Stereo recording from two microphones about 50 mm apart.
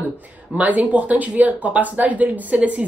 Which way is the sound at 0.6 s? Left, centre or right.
Right.